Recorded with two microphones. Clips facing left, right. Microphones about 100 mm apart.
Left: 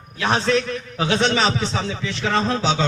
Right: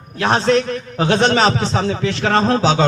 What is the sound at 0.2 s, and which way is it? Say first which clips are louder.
A man's voice: right 4 dB; 45° right (ahead or behind).